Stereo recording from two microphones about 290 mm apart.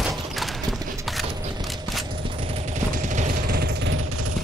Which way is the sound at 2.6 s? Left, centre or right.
Right.